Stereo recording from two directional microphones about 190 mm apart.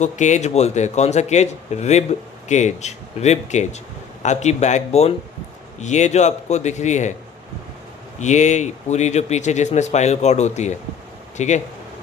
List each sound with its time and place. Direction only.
0.0 s speech: 40° left (ahead or behind)
8.2 s speech: 40° left (ahead or behind)